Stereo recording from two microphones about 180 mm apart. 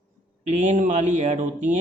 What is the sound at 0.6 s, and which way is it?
Speech, 40° right (ahead or behind).